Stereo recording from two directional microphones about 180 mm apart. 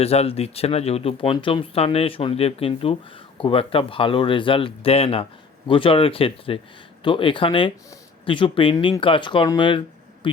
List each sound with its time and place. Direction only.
0.0 s speech: 35° left (ahead or behind)